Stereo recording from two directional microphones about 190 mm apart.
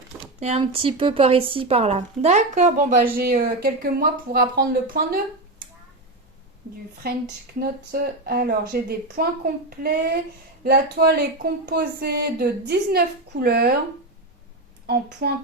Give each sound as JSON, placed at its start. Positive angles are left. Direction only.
{"t": 0.3, "sound": "a woman's voice", "side_deg": -35}
{"t": 7.0, "sound": "a woman's voice", "side_deg": -55}
{"t": 14.8, "sound": "a woman's voice", "side_deg": -55}